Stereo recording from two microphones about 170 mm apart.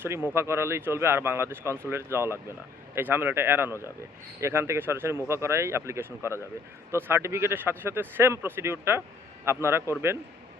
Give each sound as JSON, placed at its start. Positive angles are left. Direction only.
{"t": 0.0, "sound": "speech", "side_deg": -10}